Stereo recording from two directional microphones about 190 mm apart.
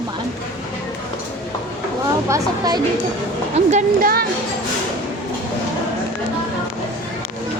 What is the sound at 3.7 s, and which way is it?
Speech, 50° right (ahead or behind).